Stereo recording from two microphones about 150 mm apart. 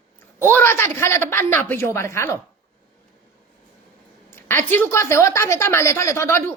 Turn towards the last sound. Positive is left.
turn(degrees=20)  # may be behind; listen again after turning